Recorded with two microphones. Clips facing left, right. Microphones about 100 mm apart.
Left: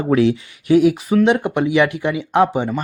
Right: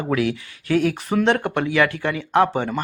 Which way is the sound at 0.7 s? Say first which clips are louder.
Left 6 dB; 10° left (ahead or behind).